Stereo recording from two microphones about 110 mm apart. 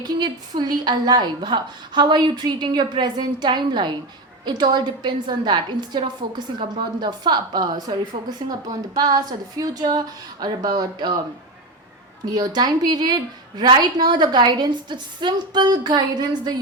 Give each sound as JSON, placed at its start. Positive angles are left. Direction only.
{"t": 0.0, "sound": "a woman's voice", "side_deg": -40}
{"t": 12.2, "sound": "a woman's voice", "side_deg": -35}